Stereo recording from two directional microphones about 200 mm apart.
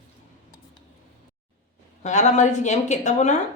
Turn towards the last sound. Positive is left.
turn(degrees=35)  # may be behind; listen again after turning